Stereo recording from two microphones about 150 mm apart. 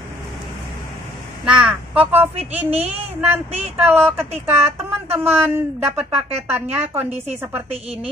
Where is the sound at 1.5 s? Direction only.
5° right (ahead or behind).